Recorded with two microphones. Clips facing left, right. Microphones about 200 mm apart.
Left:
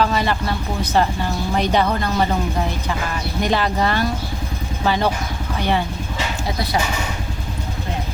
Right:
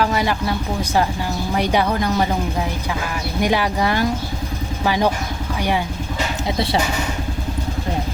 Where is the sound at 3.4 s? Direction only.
10° right (ahead or behind).